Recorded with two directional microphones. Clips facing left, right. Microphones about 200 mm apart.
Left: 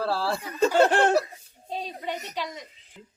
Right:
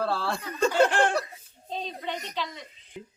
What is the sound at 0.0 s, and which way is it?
Snicker, 5° left (ahead or behind).